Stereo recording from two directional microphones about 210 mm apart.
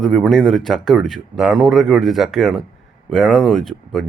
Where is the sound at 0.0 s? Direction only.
Centre (ahead or behind).